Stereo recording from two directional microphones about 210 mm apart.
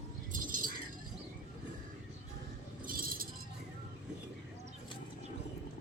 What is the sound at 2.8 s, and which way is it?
Chink, 45° right (ahead or behind).